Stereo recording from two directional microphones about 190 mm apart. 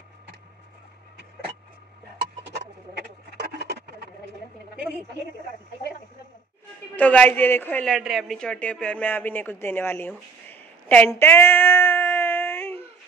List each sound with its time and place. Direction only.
2.5 s frog: 60° right (ahead or behind)
7.0 s a woman's voice: 10° left (ahead or behind)